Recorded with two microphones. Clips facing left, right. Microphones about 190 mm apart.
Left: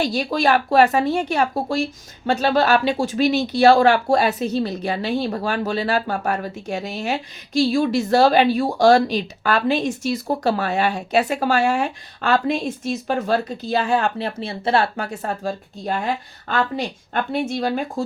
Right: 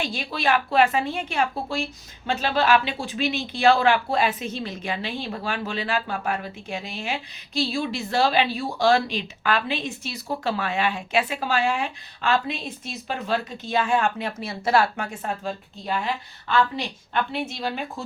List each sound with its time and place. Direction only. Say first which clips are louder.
0.0 s speech: left 7 dB; 40° left (ahead or behind)